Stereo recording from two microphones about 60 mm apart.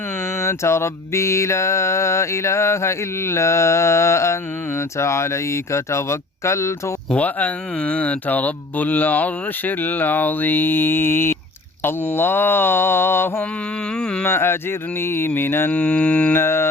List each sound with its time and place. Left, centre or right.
0.3 s mantra: left
7.1 s speech: left
11.8 s mantra: left
14.0 s speech: centre
14.3 s mantra: left
15.7 s speech: centre
16.3 s mantra: left